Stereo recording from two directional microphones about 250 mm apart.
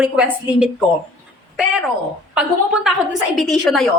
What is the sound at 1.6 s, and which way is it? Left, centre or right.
A woman's voice, centre.